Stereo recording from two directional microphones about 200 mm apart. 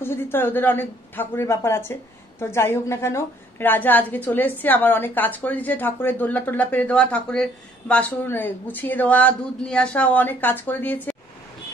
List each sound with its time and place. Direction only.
0.0 s a woman's voice: 10° left (ahead or behind)